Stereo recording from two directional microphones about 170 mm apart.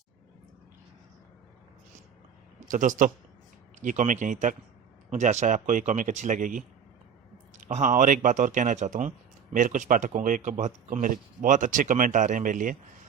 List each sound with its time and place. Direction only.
2.6 s a man's voice: 50° right (ahead or behind)